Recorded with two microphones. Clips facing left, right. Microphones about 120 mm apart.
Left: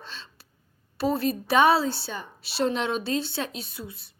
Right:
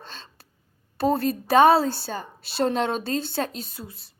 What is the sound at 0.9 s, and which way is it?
A woman's voice, 50° right (ahead or behind).